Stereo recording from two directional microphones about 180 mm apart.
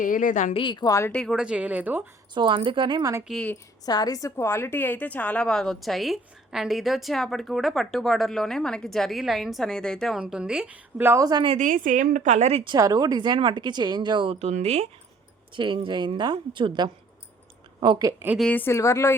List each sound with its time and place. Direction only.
0.0 s a woman's voice: 50° left (ahead or behind)
0.6 s a woman's voice: 25° left (ahead or behind)
1.1 s speech: centre (ahead or behind)
2.3 s speech: 25° right (ahead or behind)
3.2 s a woman's voice: 5° left (ahead or behind)
3.8 s a woman's voice: 20° left (ahead or behind); by 11.5 s 20° right (ahead or behind)
11.5 s a woman's voice: 45° right (ahead or behind)
12.7 s speech: 20° right (ahead or behind)
18.3 s a woman's voice: 10° left (ahead or behind)